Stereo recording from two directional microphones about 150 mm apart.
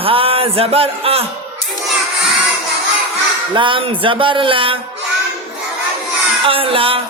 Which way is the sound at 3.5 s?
35° right (ahead or behind).